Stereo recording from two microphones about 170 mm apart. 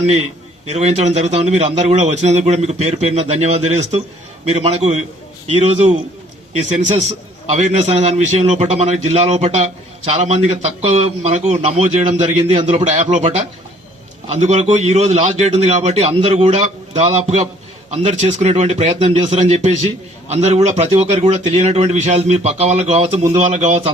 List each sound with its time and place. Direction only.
0.7 s a man's voice: 40° right (ahead or behind)
14.4 s a man's voice: 40° right (ahead or behind)